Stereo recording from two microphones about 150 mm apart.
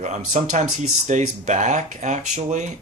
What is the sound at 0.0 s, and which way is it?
Speech, 55° right (ahead or behind).